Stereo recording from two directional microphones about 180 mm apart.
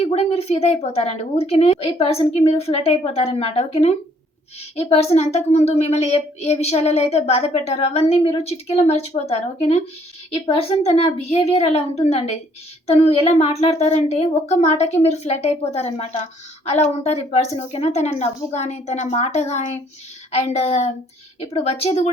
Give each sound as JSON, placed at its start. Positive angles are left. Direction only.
{"t": 0.0, "sound": "a woman's voice", "side_deg": 35}